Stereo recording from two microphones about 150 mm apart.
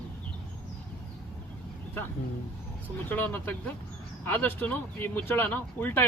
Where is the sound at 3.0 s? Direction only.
10° left (ahead or behind).